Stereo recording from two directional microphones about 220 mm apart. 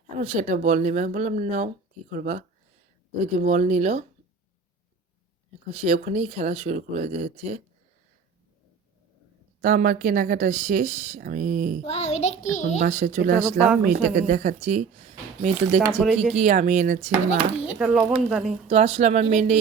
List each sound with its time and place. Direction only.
0.2 s speech: 30° right (ahead or behind)
5.7 s speech: 30° right (ahead or behind)
9.6 s speech: 40° right (ahead or behind)
11.9 s a child's voice: 30° left (ahead or behind)
12.8 s speech: 35° right (ahead or behind)
15.8 s speech: 10° right (ahead or behind)
16.3 s speech: 30° right (ahead or behind)
17.7 s speech: 5° right (ahead or behind)
18.7 s speech: 30° right (ahead or behind)